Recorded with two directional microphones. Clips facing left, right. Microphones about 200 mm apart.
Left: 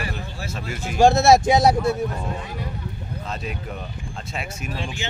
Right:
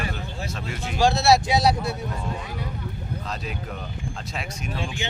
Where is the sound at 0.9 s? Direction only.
50° left (ahead or behind).